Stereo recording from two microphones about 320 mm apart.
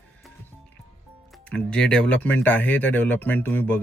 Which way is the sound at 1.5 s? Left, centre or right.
Centre.